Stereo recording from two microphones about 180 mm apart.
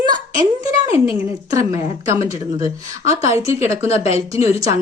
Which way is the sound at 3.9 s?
35° left (ahead or behind).